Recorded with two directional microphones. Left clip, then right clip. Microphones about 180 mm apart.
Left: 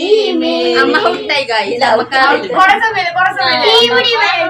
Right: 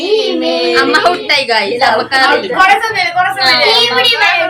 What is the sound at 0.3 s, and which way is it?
Child singing, 15° left (ahead or behind).